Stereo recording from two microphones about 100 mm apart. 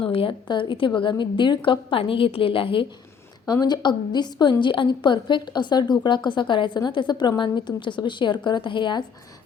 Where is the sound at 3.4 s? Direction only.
40° left (ahead or behind).